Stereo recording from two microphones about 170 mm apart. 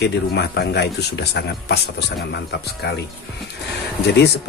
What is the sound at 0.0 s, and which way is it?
Speech, 75° left (ahead or behind).